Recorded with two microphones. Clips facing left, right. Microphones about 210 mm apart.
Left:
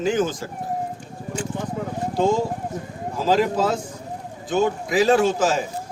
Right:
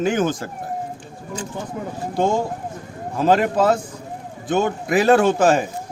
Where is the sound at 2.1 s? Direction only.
55° right (ahead or behind).